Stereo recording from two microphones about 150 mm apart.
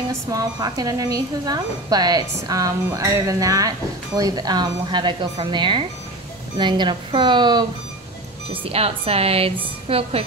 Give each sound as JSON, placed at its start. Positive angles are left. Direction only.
{"t": 0.1, "sound": "a woman's voice", "side_deg": -25}
{"t": 8.6, "sound": "a woman's voice", "side_deg": -40}